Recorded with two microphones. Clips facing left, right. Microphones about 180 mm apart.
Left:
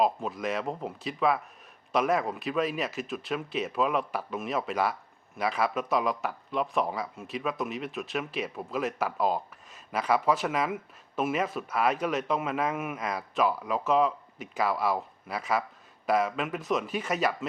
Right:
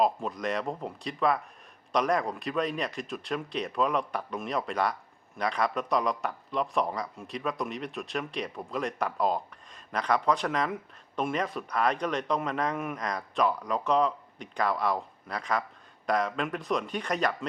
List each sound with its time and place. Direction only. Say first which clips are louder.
0.0 s speech: even; centre (ahead or behind)